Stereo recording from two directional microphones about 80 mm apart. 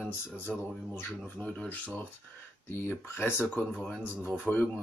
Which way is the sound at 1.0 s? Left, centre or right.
Left.